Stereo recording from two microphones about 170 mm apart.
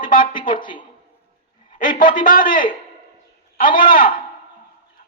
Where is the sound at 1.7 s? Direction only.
50° left (ahead or behind).